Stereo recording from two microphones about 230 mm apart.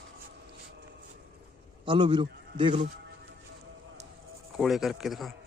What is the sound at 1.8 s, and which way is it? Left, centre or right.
A man's voice, right.